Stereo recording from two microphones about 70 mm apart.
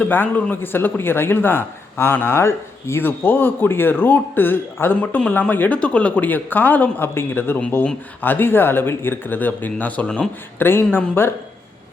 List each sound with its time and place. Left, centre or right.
0.0 s a man's voice: left